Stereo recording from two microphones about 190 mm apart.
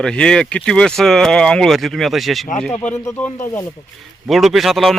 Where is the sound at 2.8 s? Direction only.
15° left (ahead or behind).